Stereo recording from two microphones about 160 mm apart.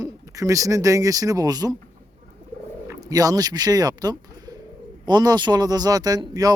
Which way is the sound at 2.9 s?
20° right (ahead or behind).